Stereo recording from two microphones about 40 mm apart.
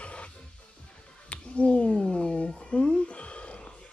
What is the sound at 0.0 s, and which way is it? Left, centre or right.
Music, left.